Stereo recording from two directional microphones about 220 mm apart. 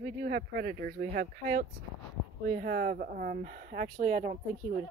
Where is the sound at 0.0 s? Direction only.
40° right (ahead or behind).